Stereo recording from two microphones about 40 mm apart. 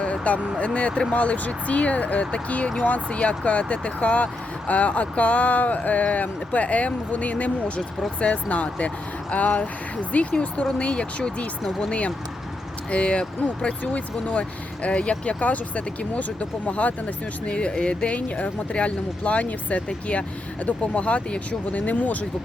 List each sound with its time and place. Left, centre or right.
0.0 s vehicle: left
0.3 s speech: right
0.6 s speech: left
10.8 s speech: left
15.4 s speech: left
20.9 s speech: left